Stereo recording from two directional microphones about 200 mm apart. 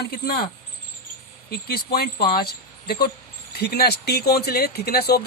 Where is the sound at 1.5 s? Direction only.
50° left (ahead or behind).